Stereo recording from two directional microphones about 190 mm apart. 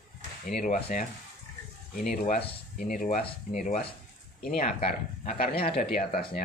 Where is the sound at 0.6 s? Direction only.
40° left (ahead or behind).